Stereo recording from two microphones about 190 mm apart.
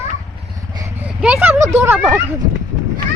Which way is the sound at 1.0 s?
10° right (ahead or behind).